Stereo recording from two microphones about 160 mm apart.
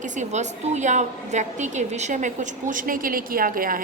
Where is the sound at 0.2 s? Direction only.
45° right (ahead or behind).